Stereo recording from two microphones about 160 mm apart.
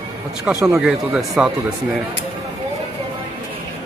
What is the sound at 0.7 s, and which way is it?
Speech, 5° right (ahead or behind).